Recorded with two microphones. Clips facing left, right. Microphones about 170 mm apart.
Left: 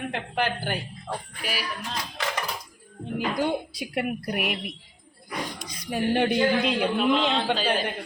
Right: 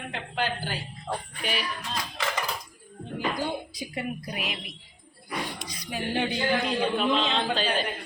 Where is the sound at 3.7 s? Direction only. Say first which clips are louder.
Left 4 dB; 65° left (ahead or behind).